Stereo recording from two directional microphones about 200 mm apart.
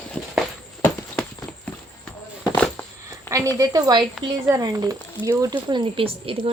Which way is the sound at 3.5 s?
20° right (ahead or behind).